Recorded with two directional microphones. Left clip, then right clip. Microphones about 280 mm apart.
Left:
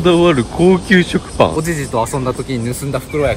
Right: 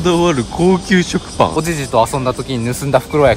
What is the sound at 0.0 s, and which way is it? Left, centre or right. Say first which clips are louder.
Speech: left 2 dB; centre.